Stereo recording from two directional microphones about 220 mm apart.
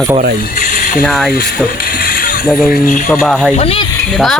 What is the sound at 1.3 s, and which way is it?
Speech, 40° left (ahead or behind).